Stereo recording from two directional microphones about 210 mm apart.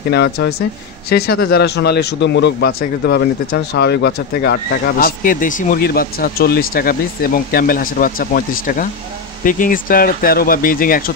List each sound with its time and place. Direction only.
0.1 s a man's voice: 50° left (ahead or behind)